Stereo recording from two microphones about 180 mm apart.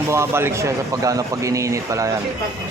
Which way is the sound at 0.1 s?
15° right (ahead or behind).